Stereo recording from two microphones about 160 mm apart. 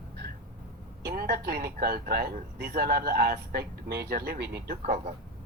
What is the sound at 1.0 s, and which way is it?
Speech, 70° right (ahead or behind).